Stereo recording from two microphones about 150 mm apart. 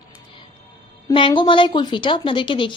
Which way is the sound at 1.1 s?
30° left (ahead or behind).